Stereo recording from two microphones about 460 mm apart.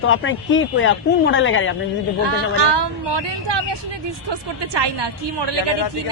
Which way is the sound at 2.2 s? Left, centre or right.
Right.